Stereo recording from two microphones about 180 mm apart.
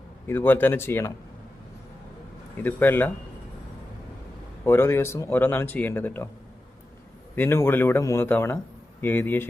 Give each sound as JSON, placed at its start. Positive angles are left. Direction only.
{"t": 0.3, "sound": "speech", "side_deg": 10}
{"t": 2.6, "sound": "speech", "side_deg": 10}
{"t": 4.6, "sound": "speech", "side_deg": 15}
{"t": 7.3, "sound": "speech", "side_deg": 15}